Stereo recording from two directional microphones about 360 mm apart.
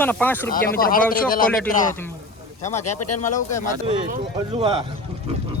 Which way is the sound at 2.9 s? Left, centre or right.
Left.